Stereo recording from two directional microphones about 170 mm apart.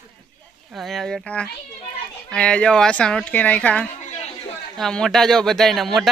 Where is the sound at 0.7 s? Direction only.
Centre (ahead or behind).